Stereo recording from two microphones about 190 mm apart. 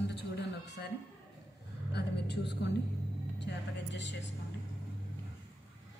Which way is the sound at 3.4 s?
70° left (ahead or behind).